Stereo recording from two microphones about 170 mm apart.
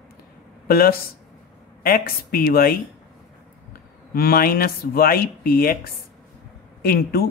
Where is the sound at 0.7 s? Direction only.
60° left (ahead or behind).